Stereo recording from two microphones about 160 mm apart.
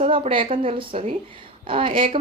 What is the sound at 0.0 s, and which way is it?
Speech, 35° right (ahead or behind).